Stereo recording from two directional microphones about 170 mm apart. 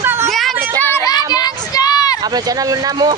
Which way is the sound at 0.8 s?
15° left (ahead or behind).